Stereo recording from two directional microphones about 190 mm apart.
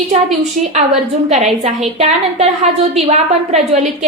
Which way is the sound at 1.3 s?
35° right (ahead or behind).